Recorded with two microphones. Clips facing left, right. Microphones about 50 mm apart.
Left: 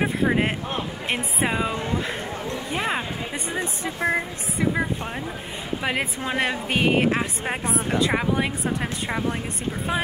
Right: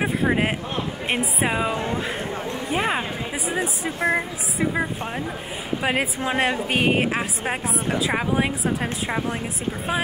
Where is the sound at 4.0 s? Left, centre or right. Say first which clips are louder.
Right 1 dB; right.